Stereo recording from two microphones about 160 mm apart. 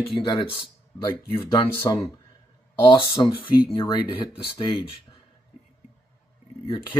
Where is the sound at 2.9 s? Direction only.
35° left (ahead or behind).